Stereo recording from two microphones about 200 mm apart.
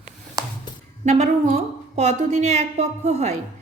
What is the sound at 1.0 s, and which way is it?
A woman's voice, 35° right (ahead or behind).